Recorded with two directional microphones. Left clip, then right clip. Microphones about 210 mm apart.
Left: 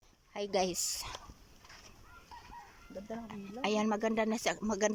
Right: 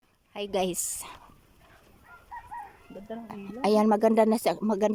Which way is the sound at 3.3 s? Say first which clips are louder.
Right 10 dB; 25° right (ahead or behind).